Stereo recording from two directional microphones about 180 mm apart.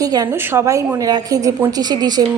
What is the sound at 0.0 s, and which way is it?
A woman's voice, 20° right (ahead or behind).